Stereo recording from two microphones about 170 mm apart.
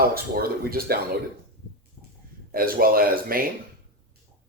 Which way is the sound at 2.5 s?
60° right (ahead or behind).